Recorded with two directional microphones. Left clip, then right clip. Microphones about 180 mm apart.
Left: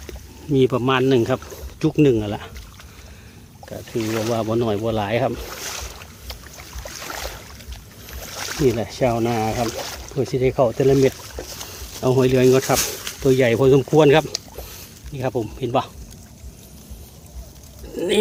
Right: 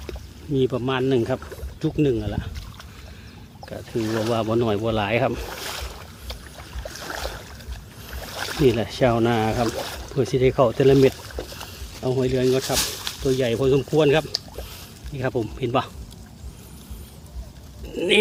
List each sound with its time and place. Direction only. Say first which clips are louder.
0.5 s speech: left 5 dB; 30° left (ahead or behind)
3.7 s speech: left 1 dB; 20° left (ahead or behind)
5.7 s boat: left 1 dB; centre (ahead or behind)
8.5 s speech: even; 5° left (ahead or behind)
12.0 s speech: left 6 dB; 30° left (ahead or behind)
15.1 s speech: left 1 dB; 15° left (ahead or behind)
17.9 s music: right 2 dB; 10° left (ahead or behind)